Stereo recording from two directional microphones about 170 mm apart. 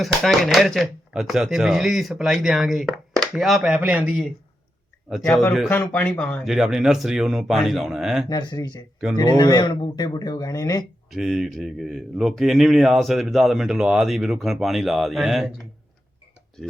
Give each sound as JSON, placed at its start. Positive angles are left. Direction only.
{"t": 0.0, "sound": "a man's voice", "side_deg": 0}
{"t": 5.3, "sound": "a man's voice", "side_deg": 15}
{"t": 8.3, "sound": "speech", "side_deg": 25}
{"t": 11.1, "sound": "a man's voice", "side_deg": 0}
{"t": 16.6, "sound": "a man's voice", "side_deg": 0}